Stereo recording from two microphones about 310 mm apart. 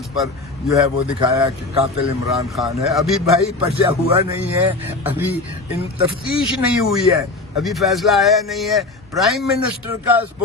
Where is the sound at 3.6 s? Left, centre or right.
Centre.